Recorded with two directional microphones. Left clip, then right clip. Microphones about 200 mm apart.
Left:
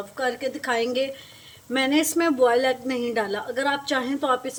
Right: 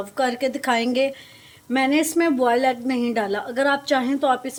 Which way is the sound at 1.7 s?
20° right (ahead or behind).